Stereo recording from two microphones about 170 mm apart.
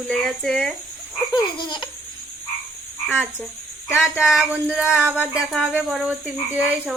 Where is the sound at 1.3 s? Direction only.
25° left (ahead or behind).